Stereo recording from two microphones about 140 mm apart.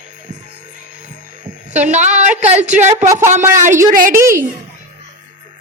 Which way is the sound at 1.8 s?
55° right (ahead or behind).